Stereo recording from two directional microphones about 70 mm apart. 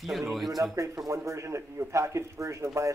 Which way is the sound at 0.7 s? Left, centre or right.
Right.